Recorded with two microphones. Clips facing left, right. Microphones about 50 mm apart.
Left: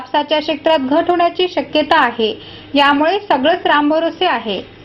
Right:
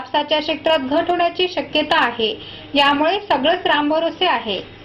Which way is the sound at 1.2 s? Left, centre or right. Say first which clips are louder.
Left 4 dB; left.